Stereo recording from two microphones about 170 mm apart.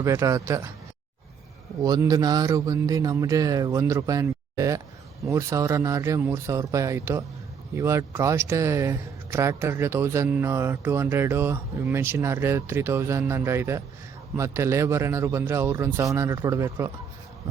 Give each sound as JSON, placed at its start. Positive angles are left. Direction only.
{"t": 0.0, "sound": "speech", "side_deg": -20}
{"t": 1.8, "sound": "a man's voice", "side_deg": -20}